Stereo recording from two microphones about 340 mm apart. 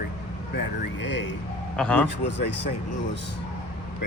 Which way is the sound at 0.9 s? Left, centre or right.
Left.